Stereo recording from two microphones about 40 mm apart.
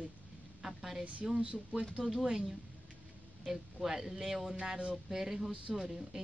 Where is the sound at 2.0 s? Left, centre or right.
Centre.